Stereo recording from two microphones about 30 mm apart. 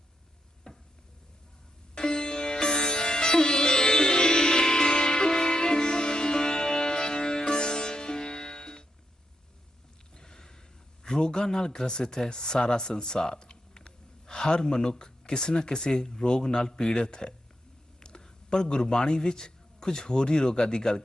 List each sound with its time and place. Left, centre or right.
0.7 s stir: left
2.0 s music: left
10.2 s a sound: left
11.5 s a man's voice: left